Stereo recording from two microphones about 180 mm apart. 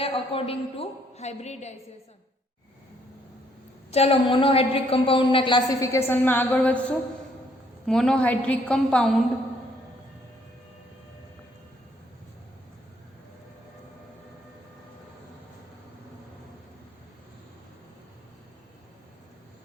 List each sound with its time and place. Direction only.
0.0 s a woman's voice: 30° left (ahead or behind)
3.9 s a woman's voice: 30° left (ahead or behind); by 9.1 s 5° left (ahead or behind)